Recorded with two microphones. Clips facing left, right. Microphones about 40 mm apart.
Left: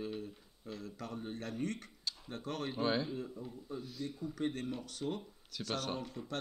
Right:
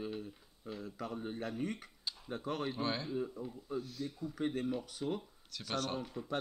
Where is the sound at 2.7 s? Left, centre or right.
Centre.